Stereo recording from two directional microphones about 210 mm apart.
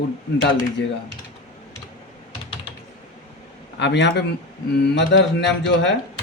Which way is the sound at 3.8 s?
55° left (ahead or behind).